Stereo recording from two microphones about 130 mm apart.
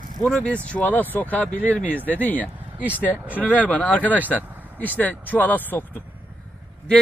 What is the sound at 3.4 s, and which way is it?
Speech, 10° left (ahead or behind).